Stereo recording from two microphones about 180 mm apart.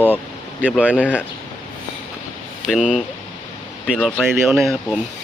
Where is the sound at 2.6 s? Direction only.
Centre (ahead or behind).